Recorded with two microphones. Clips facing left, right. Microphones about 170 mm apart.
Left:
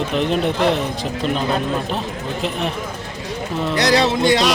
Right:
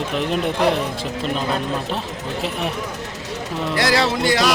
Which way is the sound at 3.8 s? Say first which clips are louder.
Left 3 dB; 20° left (ahead or behind).